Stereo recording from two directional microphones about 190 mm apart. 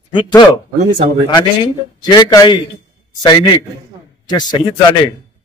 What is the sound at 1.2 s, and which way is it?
A man's voice, 20° left (ahead or behind).